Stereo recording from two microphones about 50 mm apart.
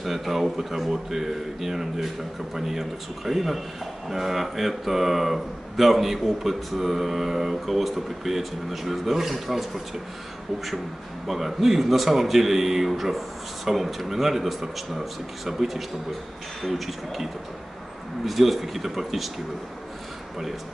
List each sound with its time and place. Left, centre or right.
0.0 s speech: centre
11.2 s speech: centre